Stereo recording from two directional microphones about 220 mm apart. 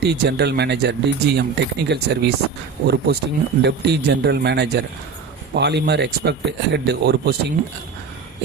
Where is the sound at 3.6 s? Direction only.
50° right (ahead or behind).